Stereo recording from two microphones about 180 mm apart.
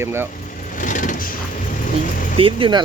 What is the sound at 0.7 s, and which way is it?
Vehicle, 45° left (ahead or behind).